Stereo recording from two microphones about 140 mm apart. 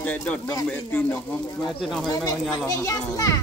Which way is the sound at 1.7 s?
Centre (ahead or behind).